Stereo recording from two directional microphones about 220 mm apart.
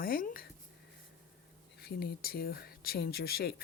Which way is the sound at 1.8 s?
45° left (ahead or behind).